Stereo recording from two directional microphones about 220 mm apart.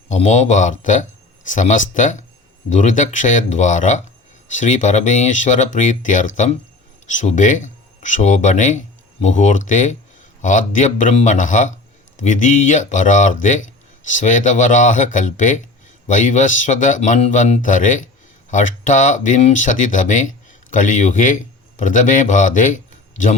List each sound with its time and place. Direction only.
0.1 s a man's voice: 30° left (ahead or behind)